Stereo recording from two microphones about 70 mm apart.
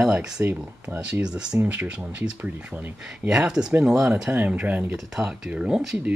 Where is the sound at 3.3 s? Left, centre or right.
Centre.